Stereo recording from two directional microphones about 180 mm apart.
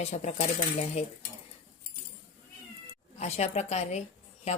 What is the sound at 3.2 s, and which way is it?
A woman's voice, 40° left (ahead or behind).